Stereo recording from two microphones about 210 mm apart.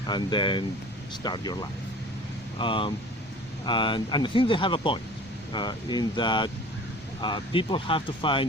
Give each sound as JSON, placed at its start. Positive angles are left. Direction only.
{"t": 0.1, "sound": "speech", "side_deg": 20}
{"t": 2.6, "sound": "speech", "side_deg": 25}